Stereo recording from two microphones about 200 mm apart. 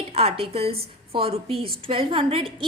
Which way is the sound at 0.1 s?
30° right (ahead or behind).